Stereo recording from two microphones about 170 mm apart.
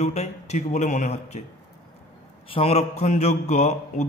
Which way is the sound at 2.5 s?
35° left (ahead or behind).